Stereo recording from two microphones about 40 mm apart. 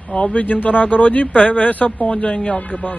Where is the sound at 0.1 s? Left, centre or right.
Left.